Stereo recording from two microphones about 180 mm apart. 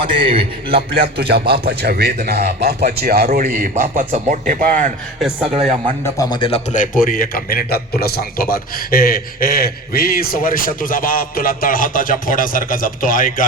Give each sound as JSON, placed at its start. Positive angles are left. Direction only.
{"t": 0.0, "sound": "a man's voice", "side_deg": -30}
{"t": 0.8, "sound": "a man's voice", "side_deg": -60}
{"t": 5.5, "sound": "speech", "side_deg": -30}
{"t": 6.1, "sound": "a man's voice", "side_deg": 25}
{"t": 6.7, "sound": "a man's voice", "side_deg": 50}